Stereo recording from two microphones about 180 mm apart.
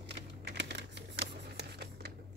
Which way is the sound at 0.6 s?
70° right (ahead or behind).